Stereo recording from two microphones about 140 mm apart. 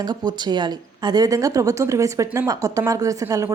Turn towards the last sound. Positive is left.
turn(degrees=-25)  # may be behind; listen again after turning